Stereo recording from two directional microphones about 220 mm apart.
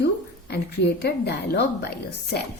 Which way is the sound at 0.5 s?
50° left (ahead or behind).